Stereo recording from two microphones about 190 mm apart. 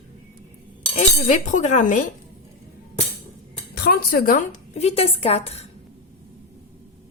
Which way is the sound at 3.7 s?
55° left (ahead or behind).